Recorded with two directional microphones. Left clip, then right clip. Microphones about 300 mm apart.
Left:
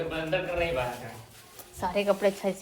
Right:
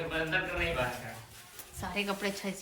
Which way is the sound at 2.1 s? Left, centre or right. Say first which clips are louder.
Left 9 dB; centre.